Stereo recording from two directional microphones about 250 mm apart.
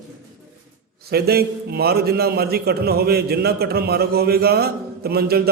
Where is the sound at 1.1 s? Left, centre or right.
Right.